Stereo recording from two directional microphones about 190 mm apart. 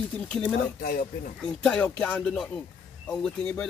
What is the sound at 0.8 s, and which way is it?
Speech, 55° left (ahead or behind).